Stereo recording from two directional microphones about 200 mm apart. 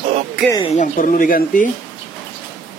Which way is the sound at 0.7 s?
40° left (ahead or behind).